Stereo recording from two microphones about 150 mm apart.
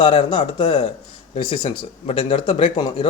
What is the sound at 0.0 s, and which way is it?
A man's voice, 35° left (ahead or behind).